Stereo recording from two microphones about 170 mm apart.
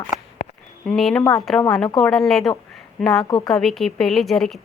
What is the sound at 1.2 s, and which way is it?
Speech, 20° left (ahead or behind).